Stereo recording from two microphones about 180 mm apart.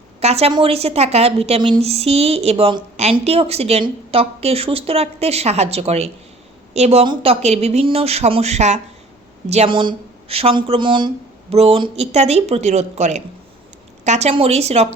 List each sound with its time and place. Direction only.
0.2 s a woman's voice: 35° right (ahead or behind)